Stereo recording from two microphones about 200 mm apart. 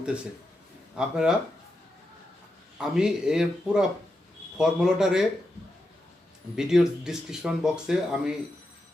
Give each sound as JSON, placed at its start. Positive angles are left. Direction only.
{"t": 0.9, "sound": "speech", "side_deg": -5}
{"t": 2.7, "sound": "speech", "side_deg": -5}
{"t": 6.6, "sound": "speech", "side_deg": 0}